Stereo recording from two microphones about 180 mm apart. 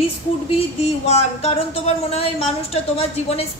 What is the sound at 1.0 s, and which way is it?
Speech, 35° left (ahead or behind).